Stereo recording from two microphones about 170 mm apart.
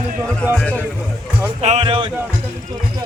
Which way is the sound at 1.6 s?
40° right (ahead or behind).